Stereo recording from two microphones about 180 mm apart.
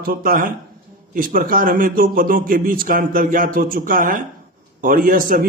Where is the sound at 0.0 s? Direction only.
55° right (ahead or behind).